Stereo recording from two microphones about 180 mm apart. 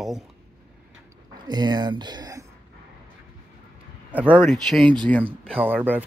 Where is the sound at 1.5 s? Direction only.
25° right (ahead or behind).